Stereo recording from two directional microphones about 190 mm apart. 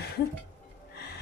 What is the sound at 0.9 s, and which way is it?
Music, 60° left (ahead or behind).